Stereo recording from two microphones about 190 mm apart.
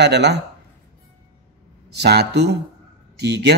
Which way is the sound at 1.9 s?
60° right (ahead or behind).